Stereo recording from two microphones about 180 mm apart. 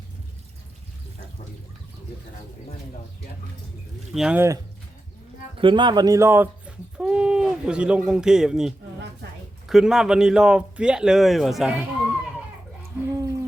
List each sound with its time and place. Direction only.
4.1 s speech: 5° right (ahead or behind)
5.5 s speech: 25° right (ahead or behind); by 11.9 s 5° right (ahead or behind)
13.1 s a sound: 15° right (ahead or behind)